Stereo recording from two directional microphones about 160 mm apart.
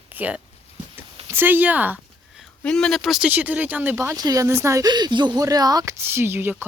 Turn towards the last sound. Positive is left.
turn(degrees=-15)  # may be behind; listen again after turning